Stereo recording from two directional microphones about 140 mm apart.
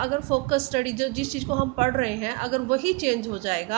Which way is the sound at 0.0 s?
50° right (ahead or behind).